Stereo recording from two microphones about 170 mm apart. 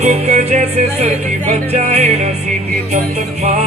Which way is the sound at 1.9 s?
40° right (ahead or behind).